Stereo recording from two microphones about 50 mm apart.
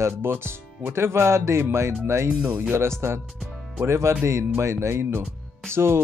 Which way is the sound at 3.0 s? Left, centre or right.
Right.